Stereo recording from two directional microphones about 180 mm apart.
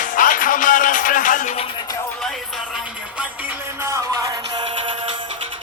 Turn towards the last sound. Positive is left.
turn(degrees=-15)  # may be behind; listen again after turning